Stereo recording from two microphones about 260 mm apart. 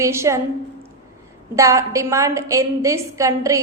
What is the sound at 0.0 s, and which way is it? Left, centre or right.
Speech, centre.